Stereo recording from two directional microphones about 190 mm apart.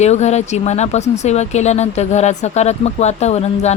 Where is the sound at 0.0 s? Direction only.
35° left (ahead or behind).